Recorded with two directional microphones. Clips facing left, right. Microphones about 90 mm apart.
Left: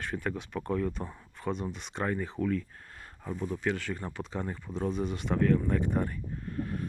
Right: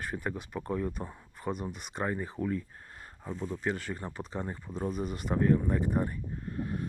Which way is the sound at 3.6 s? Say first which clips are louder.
Left 1 dB; 40° right (ahead or behind).